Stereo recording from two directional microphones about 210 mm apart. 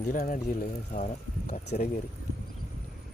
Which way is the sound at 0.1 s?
40° left (ahead or behind).